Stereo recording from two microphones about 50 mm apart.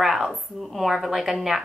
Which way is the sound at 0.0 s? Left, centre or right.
Centre.